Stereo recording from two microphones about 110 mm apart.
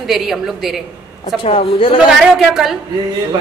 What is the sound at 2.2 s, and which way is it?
Speech, 5° right (ahead or behind).